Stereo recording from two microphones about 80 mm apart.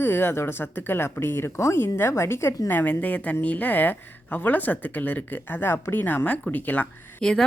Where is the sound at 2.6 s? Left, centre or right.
Left.